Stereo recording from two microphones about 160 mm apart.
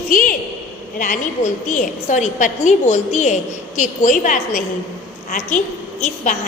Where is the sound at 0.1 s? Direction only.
55° left (ahead or behind).